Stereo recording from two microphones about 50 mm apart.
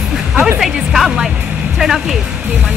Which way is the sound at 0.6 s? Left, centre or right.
Centre.